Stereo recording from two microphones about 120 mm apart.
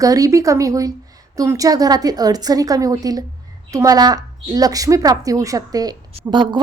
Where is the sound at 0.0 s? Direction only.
30° right (ahead or behind).